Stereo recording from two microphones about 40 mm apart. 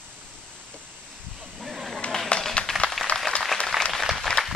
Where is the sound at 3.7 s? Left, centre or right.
Centre.